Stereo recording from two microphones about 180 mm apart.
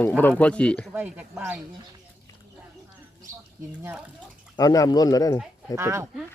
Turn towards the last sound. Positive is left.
turn(degrees=-15)  # may be behind; listen again after turning